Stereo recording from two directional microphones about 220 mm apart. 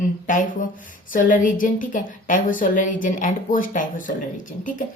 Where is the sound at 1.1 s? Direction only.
40° left (ahead or behind).